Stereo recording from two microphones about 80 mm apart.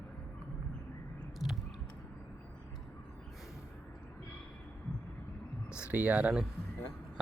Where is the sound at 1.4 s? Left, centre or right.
Centre.